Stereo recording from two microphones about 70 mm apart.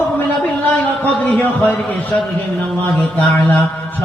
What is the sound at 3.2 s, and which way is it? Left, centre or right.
Speech, left.